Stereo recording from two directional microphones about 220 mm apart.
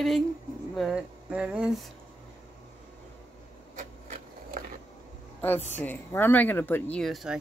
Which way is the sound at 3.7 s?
35° right (ahead or behind).